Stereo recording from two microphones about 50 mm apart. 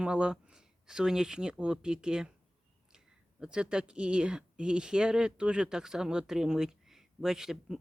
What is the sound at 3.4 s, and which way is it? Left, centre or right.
Speech, centre.